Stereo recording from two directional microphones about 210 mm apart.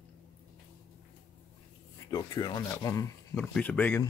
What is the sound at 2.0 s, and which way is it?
Speech, 15° left (ahead or behind).